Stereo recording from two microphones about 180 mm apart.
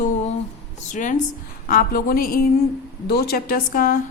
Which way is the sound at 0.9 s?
45° left (ahead or behind).